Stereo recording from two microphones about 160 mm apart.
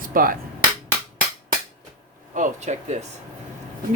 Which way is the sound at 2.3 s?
55° right (ahead or behind).